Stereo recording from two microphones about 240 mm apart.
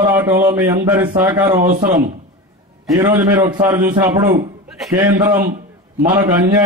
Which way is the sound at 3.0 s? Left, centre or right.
Centre.